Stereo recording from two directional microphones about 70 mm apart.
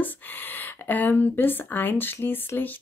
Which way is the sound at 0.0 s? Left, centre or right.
Left.